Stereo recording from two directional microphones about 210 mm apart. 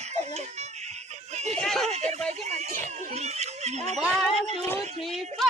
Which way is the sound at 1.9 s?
30° right (ahead or behind).